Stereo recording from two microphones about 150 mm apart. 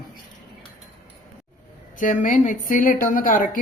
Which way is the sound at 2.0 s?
60° left (ahead or behind).